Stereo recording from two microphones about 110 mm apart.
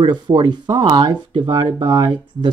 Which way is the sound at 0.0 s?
45° right (ahead or behind).